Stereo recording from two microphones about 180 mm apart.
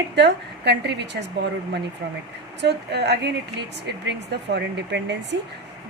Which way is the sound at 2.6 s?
70° right (ahead or behind).